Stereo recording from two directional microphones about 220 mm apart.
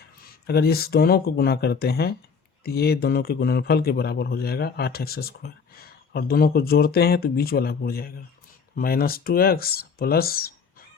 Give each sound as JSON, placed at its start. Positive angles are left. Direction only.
{"t": 0.4, "sound": "a man's voice", "side_deg": 45}